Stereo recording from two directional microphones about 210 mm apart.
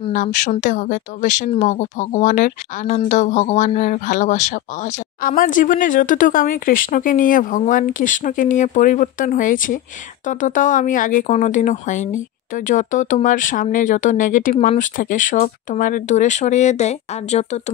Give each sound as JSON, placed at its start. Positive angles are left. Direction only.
{"t": 0.1, "sound": "speech", "side_deg": 35}